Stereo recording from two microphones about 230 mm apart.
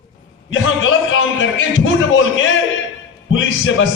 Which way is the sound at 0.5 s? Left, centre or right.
Left.